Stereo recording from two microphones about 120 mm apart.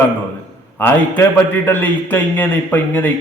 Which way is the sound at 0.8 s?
15° left (ahead or behind).